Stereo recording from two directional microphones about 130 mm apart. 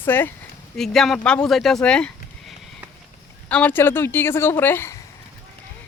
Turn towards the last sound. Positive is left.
turn(degrees=20)  # may be behind; listen again after turning